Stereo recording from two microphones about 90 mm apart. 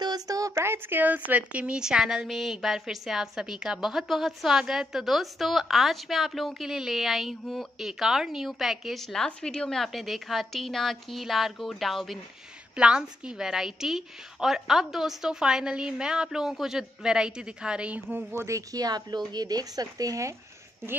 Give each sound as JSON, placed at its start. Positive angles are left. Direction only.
{"t": 0.0, "sound": "a sound", "side_deg": -45}
{"t": 0.6, "sound": "a woman's voice", "side_deg": -25}
{"t": 12.7, "sound": "a woman's voice", "side_deg": -10}
{"t": 18.3, "sound": "speech", "side_deg": -35}